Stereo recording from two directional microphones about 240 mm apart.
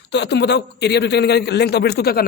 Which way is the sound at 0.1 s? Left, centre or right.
Left.